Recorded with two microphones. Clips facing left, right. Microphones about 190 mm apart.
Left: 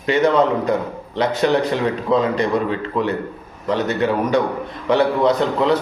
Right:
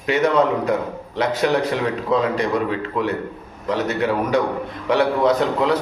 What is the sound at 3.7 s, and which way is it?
A man's voice, 5° right (ahead or behind).